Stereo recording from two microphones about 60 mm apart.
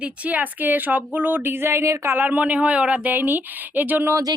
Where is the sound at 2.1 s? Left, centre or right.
Right.